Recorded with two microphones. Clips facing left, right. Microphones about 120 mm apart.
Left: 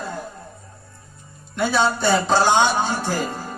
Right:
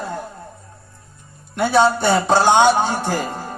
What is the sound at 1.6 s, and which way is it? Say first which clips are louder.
A man's voice: right 4 dB; 60° right (ahead or behind).